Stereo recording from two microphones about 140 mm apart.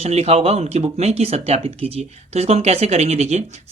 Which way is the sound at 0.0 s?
50° right (ahead or behind).